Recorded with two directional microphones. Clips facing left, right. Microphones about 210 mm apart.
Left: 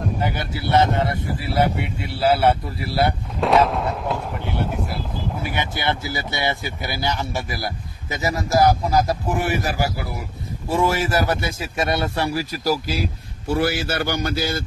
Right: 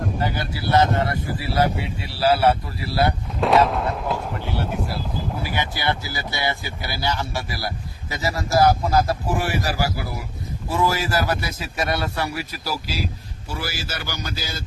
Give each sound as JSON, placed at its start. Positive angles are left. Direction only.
{"t": 0.2, "sound": "speech", "side_deg": 20}
{"t": 3.3, "sound": "speech", "side_deg": 0}
{"t": 4.8, "sound": "vehicle", "side_deg": 0}
{"t": 5.4, "sound": "speech", "side_deg": 25}
{"t": 12.6, "sound": "speech", "side_deg": 50}